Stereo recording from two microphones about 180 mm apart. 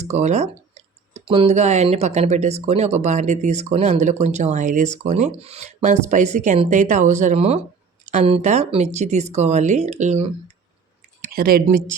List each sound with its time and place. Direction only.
0.0 s speech: 40° right (ahead or behind)
11.3 s speech: 55° right (ahead or behind)